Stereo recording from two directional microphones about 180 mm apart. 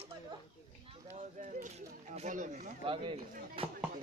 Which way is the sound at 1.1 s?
40° right (ahead or behind).